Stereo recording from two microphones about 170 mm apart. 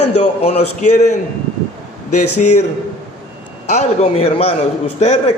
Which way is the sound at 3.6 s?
40° left (ahead or behind).